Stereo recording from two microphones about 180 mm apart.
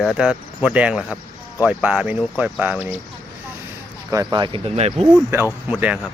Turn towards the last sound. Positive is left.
turn(degrees=-5)  # may be behind; listen again after turning